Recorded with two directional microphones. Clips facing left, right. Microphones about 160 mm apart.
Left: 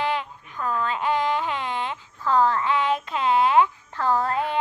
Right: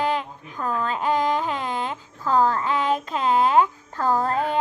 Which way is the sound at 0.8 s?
40° right (ahead or behind).